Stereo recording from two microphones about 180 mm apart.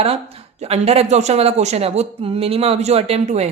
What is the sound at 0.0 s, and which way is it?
Speech, 35° right (ahead or behind).